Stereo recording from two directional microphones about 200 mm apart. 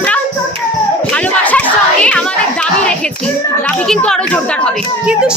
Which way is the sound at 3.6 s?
5° left (ahead or behind).